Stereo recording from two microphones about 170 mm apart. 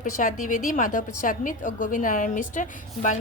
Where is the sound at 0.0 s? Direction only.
50° left (ahead or behind).